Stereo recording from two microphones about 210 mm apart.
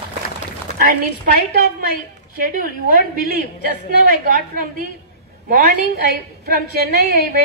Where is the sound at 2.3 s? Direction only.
45° right (ahead or behind).